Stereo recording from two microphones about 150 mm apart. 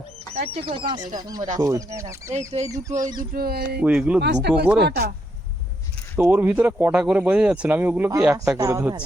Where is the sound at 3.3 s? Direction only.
90° right.